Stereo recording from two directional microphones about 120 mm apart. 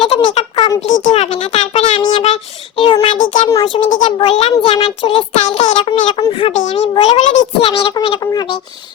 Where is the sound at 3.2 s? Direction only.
90° left.